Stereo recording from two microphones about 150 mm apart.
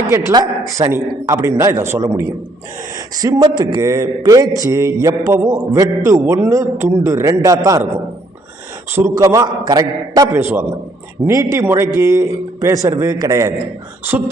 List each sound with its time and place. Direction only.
0.1 s a man's voice: 20° right (ahead or behind)
8.9 s a man's voice: 15° right (ahead or behind)